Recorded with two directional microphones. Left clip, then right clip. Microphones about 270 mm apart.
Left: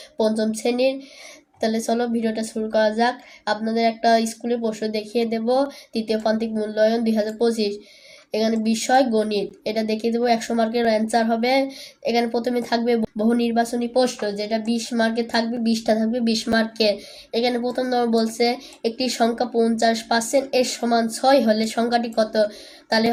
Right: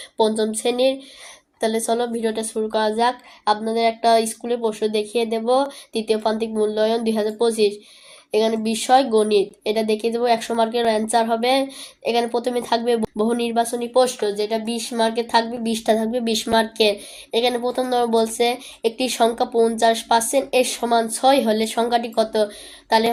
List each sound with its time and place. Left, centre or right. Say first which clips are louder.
0.2 s speech: right 2 dB; centre